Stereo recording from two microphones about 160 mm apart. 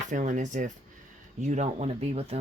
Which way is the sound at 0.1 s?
50° right (ahead or behind).